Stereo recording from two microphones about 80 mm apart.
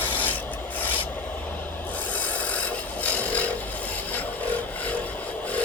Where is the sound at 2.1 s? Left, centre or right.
Centre.